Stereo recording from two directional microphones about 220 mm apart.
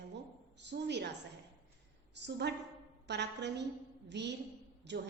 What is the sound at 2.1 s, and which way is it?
A woman's voice, 50° right (ahead or behind).